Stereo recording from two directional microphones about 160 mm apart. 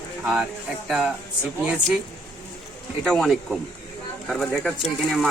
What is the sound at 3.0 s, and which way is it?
Speech, centre (ahead or behind).